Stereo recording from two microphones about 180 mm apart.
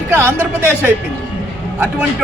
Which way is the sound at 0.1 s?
15° right (ahead or behind).